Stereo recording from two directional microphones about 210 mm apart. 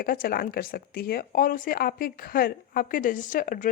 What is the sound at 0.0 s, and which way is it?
Speech, 45° left (ahead or behind).